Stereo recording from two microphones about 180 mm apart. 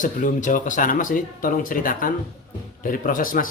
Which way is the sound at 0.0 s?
45° left (ahead or behind).